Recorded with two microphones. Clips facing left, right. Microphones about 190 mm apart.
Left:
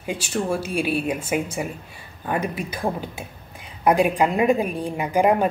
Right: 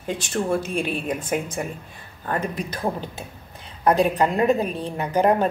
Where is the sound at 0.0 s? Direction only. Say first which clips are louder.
Even; 10° left (ahead or behind).